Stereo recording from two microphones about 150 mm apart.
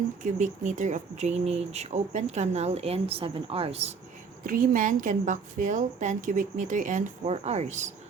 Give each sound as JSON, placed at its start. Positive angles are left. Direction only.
{"t": 0.2, "sound": "speech", "side_deg": -55}
{"t": 4.4, "sound": "a woman's voice", "side_deg": -65}
{"t": 7.3, "sound": "speech", "side_deg": -45}